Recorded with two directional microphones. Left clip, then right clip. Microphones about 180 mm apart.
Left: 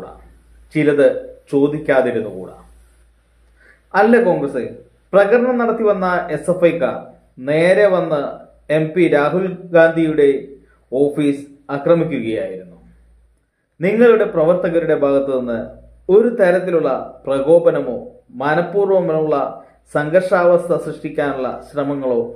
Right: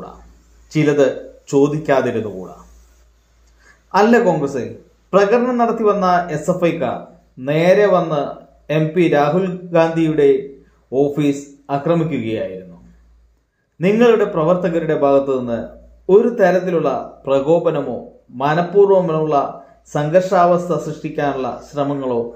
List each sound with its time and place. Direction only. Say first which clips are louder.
0.7 s speech: left 1 dB; 25° right (ahead or behind)
3.9 s speech: left 1 dB; 25° right (ahead or behind)
13.7 s speech: left 1 dB; 25° right (ahead or behind)